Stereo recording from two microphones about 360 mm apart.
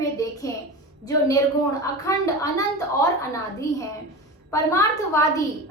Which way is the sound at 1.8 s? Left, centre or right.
Centre.